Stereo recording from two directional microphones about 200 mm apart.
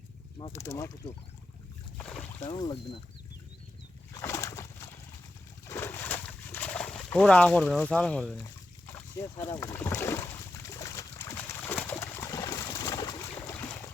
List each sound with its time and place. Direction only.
0.3 s speech: 20° left (ahead or behind)
2.0 s boat: 5° left (ahead or behind)
2.4 s speech: 20° left (ahead or behind)
4.1 s a sound: 15° left (ahead or behind)
8.9 s boat: 15° left (ahead or behind)